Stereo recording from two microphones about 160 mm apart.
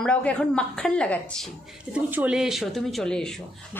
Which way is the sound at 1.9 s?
10° right (ahead or behind).